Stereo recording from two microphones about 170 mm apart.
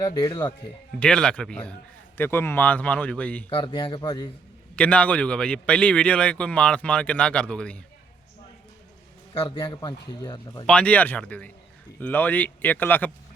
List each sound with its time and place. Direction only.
0.0 s speech: 20° left (ahead or behind)
0.9 s a man's voice: 5° left (ahead or behind)
3.5 s speech: 30° left (ahead or behind)
4.8 s a man's voice: 10° left (ahead or behind)
9.6 s speech: 20° left (ahead or behind)
10.7 s a man's voice: 5° left (ahead or behind)